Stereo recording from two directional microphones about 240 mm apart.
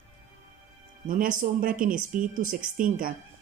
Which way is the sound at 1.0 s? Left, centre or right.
Right.